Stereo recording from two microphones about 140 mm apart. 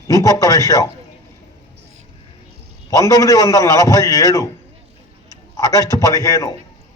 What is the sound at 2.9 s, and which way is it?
A man's voice, 25° left (ahead or behind).